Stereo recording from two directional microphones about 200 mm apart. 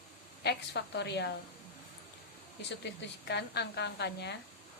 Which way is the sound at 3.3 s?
55° left (ahead or behind).